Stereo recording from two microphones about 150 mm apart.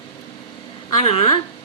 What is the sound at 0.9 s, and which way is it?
Speech, 40° left (ahead or behind).